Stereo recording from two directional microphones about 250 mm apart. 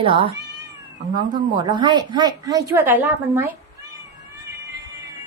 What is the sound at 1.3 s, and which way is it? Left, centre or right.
A woman's voice, centre.